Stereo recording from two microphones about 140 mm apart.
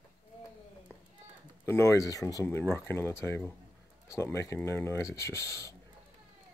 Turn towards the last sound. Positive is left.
turn(degrees=20)  # may be behind; listen again after turning